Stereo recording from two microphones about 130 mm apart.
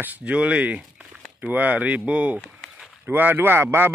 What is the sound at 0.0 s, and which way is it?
Speech, 10° right (ahead or behind).